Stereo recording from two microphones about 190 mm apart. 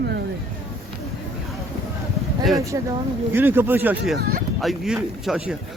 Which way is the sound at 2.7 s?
20° right (ahead or behind).